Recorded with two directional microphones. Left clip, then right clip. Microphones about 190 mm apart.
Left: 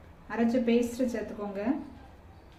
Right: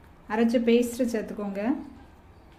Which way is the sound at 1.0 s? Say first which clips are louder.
Right 3 dB; 50° right (ahead or behind).